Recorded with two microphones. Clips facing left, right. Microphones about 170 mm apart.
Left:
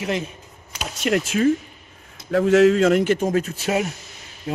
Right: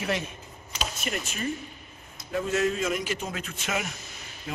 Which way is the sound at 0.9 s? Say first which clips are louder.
Left 18 dB; 85° left.